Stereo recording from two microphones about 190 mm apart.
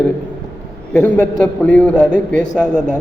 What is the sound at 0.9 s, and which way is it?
A man's voice, 10° left (ahead or behind).